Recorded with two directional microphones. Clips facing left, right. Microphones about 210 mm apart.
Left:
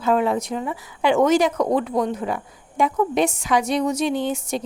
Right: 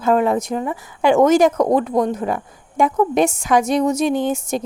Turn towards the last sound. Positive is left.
turn(degrees=-45)  # may be behind; listen again after turning